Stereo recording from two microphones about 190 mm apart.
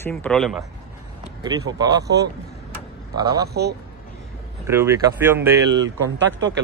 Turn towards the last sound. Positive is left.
turn(degrees=-80)